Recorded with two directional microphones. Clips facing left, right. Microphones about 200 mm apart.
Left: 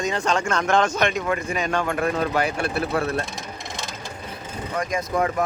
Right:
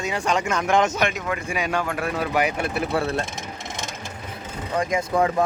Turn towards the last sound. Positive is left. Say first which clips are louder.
# right 2 dB
turn(degrees=-25)  # may be behind; listen again after turning